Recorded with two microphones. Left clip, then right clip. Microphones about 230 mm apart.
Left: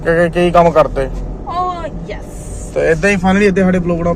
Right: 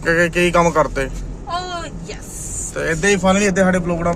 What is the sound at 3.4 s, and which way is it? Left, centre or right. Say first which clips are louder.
Speech: left 3 dB; right.